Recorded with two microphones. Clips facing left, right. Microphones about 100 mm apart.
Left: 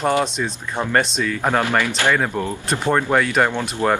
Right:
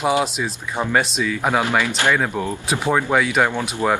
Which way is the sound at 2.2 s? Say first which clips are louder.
Even; 5° right (ahead or behind).